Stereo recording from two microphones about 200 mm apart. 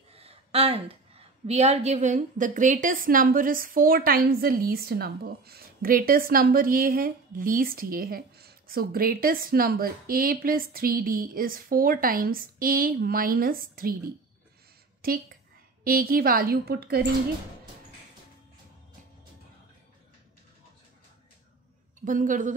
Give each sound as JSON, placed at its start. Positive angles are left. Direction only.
{"t": 0.1, "sound": "a woman's voice", "side_deg": -30}
{"t": 22.0, "sound": "a woman's voice", "side_deg": -40}